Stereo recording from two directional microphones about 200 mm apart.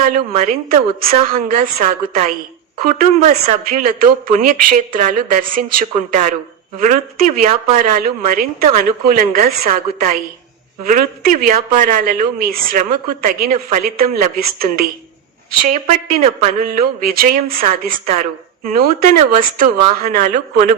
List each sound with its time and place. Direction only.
0.3 s a woman's voice: 45° right (ahead or behind)
16.6 s speech: 45° right (ahead or behind)